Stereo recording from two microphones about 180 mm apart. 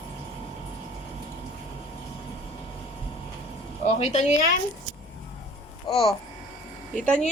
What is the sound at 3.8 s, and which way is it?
Speech, 40° left (ahead or behind).